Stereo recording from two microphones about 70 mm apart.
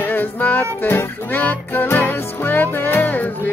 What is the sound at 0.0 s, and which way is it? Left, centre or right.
Music, left.